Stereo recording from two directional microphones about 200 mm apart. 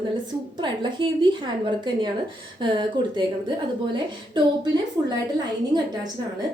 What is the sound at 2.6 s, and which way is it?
Speech, 25° right (ahead or behind).